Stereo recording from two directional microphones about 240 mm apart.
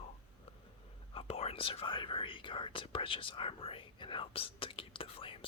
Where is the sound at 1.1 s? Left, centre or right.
Left.